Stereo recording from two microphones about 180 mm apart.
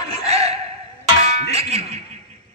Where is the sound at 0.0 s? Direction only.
35° right (ahead or behind).